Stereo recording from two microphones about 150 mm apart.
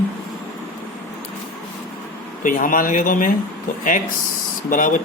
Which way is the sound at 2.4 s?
65° left (ahead or behind).